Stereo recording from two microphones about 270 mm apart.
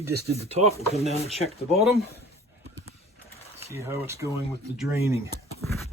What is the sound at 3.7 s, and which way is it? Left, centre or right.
Speech, centre.